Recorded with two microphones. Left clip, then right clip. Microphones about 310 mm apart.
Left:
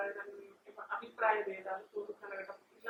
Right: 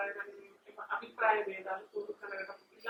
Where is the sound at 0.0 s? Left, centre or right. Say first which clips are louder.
Right 2 dB; centre.